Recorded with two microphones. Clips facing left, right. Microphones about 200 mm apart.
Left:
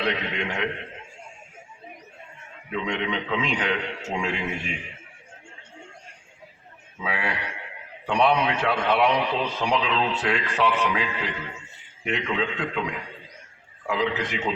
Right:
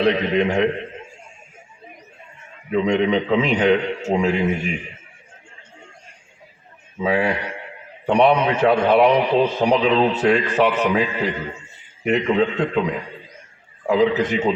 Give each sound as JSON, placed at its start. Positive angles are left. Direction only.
{"t": 0.0, "sound": "a man's voice", "side_deg": -40}
{"t": 2.7, "sound": "a man's voice", "side_deg": -40}
{"t": 7.0, "sound": "a man's voice", "side_deg": -45}